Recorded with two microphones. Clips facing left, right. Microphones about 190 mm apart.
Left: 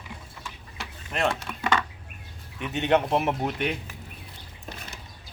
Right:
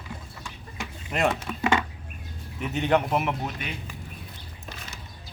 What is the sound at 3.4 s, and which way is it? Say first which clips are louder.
Speech: left 7 dB; 65° left (ahead or behind).